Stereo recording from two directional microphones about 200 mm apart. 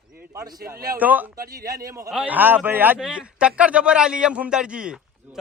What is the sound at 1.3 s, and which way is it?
Speech, 45° right (ahead or behind).